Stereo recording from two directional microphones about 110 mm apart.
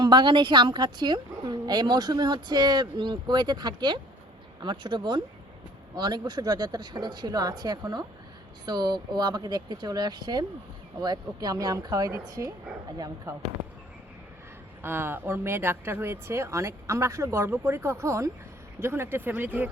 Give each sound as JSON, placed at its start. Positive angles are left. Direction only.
{"t": 0.0, "sound": "a woman's voice", "side_deg": -45}
{"t": 14.8, "sound": "speech", "side_deg": -20}